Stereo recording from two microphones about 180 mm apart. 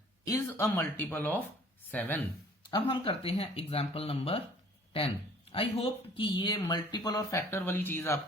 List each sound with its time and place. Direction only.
0.3 s speech: 15° left (ahead or behind)
2.6 s speech: 25° left (ahead or behind)